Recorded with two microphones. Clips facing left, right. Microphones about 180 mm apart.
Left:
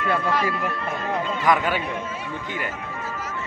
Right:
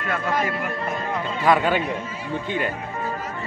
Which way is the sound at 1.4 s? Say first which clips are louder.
Right 3 dB; 25° right (ahead or behind).